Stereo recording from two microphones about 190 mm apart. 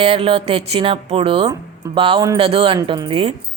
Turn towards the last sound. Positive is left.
turn(degrees=-25)  # may be behind; listen again after turning